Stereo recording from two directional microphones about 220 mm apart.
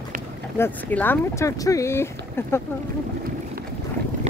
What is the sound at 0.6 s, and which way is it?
Speech, 10° left (ahead or behind).